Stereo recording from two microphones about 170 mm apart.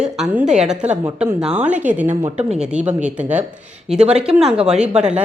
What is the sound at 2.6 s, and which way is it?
Speech, 5° right (ahead or behind).